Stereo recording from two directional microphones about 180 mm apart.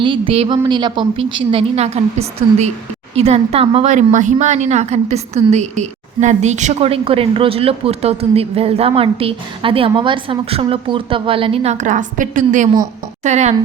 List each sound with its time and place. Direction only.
0.0 s a woman's voice: 30° right (ahead or behind)